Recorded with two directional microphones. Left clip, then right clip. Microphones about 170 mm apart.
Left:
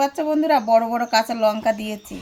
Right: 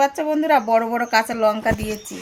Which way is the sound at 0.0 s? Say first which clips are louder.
Right 1 dB; 10° left (ahead or behind).